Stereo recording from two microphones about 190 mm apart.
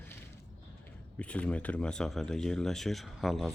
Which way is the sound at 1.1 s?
5° left (ahead or behind).